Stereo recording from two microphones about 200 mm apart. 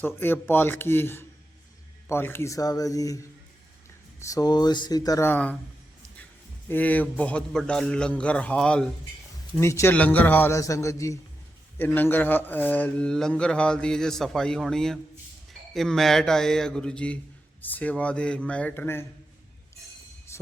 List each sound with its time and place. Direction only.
0.0 s a man's voice: 10° left (ahead or behind)
4.2 s a man's voice: 15° left (ahead or behind)
6.7 s a man's voice: 10° left (ahead or behind)
20.3 s heart sounds: 15° left (ahead or behind)